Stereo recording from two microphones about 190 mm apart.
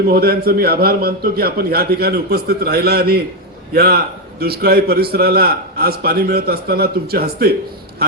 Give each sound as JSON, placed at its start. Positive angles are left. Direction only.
{"t": 0.1, "sound": "a man's voice", "side_deg": -55}